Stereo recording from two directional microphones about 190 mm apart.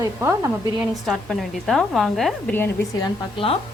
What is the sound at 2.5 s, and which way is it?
A woman's voice, 15° left (ahead or behind).